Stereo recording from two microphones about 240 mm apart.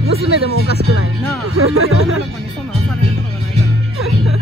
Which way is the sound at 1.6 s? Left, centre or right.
Right.